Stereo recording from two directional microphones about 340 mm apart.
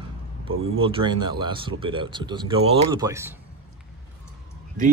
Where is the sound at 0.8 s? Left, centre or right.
Centre.